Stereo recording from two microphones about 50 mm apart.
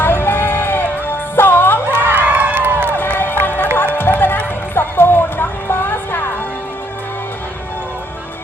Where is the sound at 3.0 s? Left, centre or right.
Left.